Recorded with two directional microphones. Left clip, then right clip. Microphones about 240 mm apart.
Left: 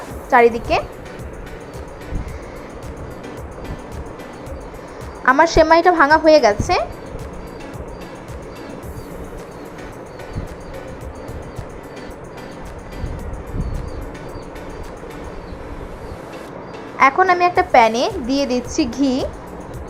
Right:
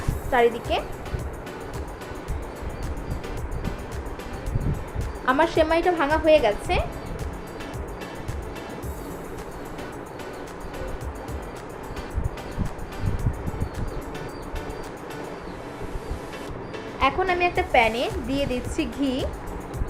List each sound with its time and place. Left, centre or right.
0.3 s a woman's voice: left
5.2 s a woman's voice: left
17.2 s a woman's voice: left